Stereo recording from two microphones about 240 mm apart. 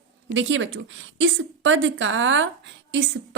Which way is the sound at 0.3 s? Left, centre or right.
Right.